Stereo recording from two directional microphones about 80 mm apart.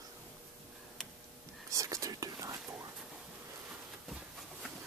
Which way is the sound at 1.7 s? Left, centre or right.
Right.